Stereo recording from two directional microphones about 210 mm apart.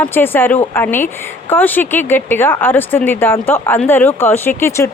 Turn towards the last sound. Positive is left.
turn(degrees=15)  # may be behind; listen again after turning